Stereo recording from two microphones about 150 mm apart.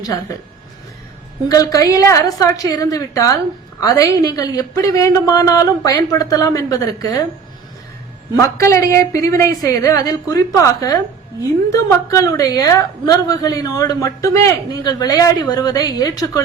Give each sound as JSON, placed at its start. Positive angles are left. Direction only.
{"t": 1.5, "sound": "a woman's voice", "side_deg": 25}
{"t": 8.4, "sound": "a woman's voice", "side_deg": 20}